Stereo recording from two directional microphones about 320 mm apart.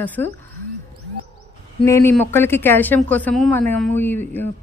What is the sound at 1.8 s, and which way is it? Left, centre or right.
Speech, centre.